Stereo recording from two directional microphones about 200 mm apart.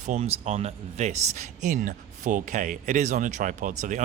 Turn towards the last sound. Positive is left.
turn(degrees=-40)  # may be behind; listen again after turning